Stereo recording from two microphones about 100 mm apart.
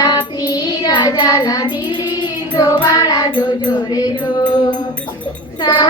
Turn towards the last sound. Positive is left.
turn(degrees=50)  # may be behind; listen again after turning